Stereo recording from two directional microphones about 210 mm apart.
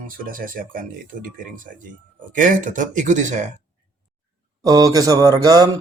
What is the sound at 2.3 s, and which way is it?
Speech, 40° right (ahead or behind).